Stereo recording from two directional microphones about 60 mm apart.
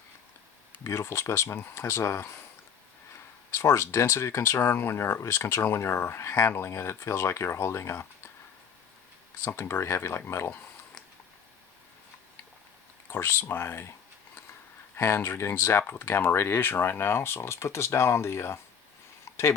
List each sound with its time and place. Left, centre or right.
0.9 s speech: left
3.5 s speech: left
9.4 s speech: left
13.1 s speech: left
14.9 s speech: left
19.2 s a sound: left